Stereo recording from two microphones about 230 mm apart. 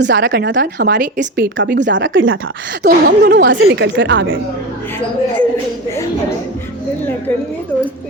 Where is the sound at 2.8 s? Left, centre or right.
Right.